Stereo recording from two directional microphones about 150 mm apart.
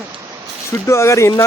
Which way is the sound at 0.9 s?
20° left (ahead or behind).